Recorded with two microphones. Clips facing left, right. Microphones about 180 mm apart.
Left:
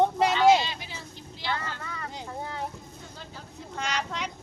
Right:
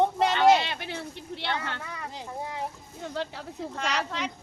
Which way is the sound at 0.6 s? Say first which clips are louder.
Right 2 dB; 60° right (ahead or behind).